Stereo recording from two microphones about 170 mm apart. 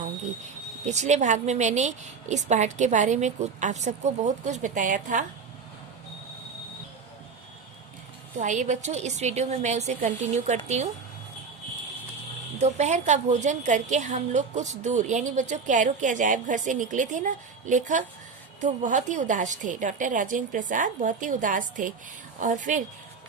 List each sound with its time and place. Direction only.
0.9 s a woman's voice: 45° right (ahead or behind)
8.4 s a woman's voice: 45° right (ahead or behind)
12.5 s a woman's voice: 40° right (ahead or behind)